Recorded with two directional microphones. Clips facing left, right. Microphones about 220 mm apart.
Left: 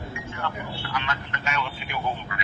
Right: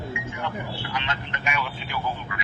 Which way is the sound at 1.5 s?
10° right (ahead or behind).